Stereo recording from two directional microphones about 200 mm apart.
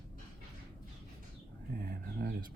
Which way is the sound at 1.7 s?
50° right (ahead or behind).